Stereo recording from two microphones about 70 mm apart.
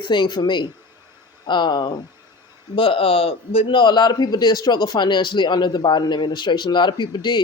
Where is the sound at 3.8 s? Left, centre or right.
Left.